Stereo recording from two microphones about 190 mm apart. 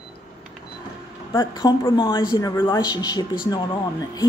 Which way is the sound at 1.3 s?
20° left (ahead or behind).